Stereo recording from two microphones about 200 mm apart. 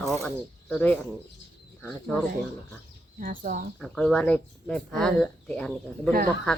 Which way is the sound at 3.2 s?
40° right (ahead or behind).